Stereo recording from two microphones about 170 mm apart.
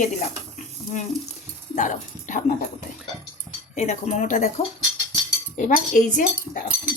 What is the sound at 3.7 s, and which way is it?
Speech, 40° left (ahead or behind).